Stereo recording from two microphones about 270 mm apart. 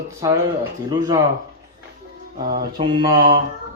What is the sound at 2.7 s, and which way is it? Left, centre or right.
Speech, centre.